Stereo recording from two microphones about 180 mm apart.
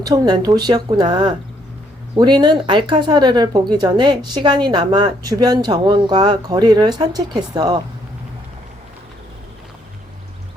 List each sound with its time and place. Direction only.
0.0 s speech: 20° right (ahead or behind)